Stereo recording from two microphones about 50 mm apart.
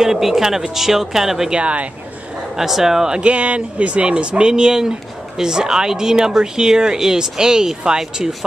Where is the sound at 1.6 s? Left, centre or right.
Right.